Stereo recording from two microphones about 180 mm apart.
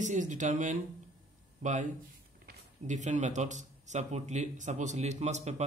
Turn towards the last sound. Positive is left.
turn(degrees=-40)  # may be behind; listen again after turning